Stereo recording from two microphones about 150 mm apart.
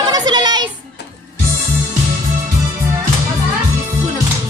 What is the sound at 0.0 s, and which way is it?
Music, 25° right (ahead or behind).